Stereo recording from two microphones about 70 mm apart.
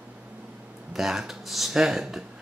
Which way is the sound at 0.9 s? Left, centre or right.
Centre.